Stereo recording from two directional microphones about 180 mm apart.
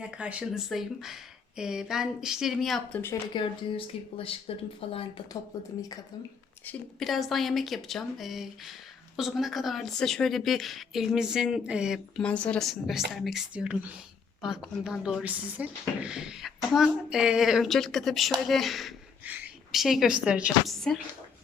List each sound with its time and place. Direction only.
0.0 s speech: 5° right (ahead or behind)
3.3 s speech: 30° left (ahead or behind)
6.7 s speech: centre (ahead or behind)